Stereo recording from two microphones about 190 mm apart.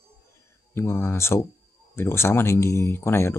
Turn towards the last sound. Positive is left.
turn(degrees=10)  # may be behind; listen again after turning